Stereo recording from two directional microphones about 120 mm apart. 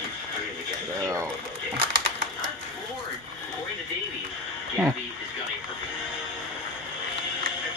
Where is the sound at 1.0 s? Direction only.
25° right (ahead or behind).